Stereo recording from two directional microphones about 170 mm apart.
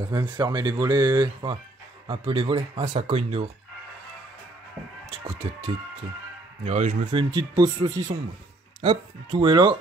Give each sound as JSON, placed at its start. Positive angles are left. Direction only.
{"t": 0.1, "sound": "speech", "side_deg": -25}
{"t": 5.1, "sound": "speech", "side_deg": -35}
{"t": 7.1, "sound": "speech", "side_deg": -30}